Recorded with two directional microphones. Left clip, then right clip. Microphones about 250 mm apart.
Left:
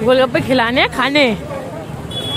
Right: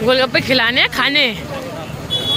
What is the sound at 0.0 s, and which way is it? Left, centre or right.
Speech, centre.